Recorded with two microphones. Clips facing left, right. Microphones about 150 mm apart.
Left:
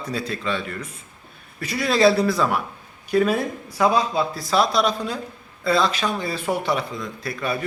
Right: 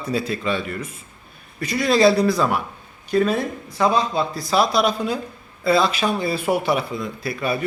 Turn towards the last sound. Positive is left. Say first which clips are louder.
# right 2 dB
turn(degrees=-5)  # may be behind; listen again after turning